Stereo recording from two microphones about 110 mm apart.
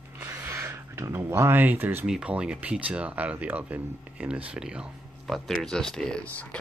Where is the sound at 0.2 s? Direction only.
25° right (ahead or behind).